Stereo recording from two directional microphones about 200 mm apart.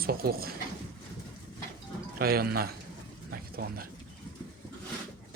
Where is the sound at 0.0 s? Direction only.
50° right (ahead or behind).